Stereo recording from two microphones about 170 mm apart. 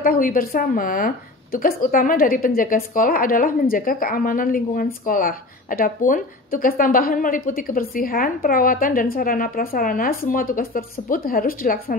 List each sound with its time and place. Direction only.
0.0 s a woman's voice: 55° left (ahead or behind)